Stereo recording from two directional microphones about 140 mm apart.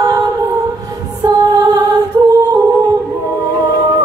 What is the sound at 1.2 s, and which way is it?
Music, 30° right (ahead or behind).